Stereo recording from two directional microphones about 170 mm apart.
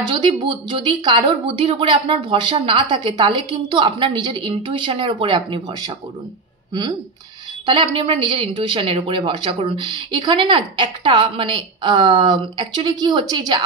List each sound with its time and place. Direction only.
0.0 s a woman's voice: 30° right (ahead or behind)